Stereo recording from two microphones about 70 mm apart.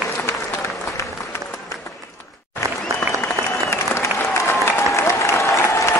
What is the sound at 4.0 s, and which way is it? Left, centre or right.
Applause, left.